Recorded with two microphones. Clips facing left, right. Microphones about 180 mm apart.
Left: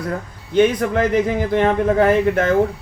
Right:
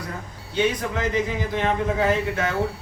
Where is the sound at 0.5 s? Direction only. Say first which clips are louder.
Left 8 dB; 55° left (ahead or behind).